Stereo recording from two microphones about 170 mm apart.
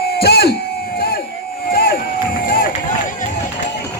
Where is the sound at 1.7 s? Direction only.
60° left (ahead or behind).